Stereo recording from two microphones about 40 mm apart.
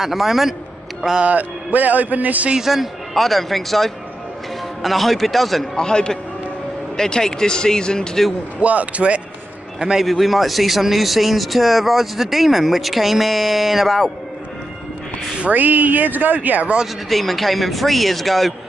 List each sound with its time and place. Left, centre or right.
0.0 s speech: centre
1.2 s a man's voice: right
2.6 s speech: centre
5.8 s speech: centre
8.5 s a man's voice: right
9.9 s speech: centre
15.5 s speech: right
16.8 s speech: centre